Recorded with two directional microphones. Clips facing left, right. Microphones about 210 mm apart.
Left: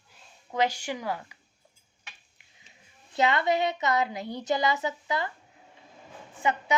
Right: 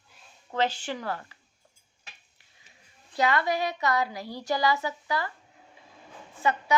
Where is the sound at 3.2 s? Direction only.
25° left (ahead or behind).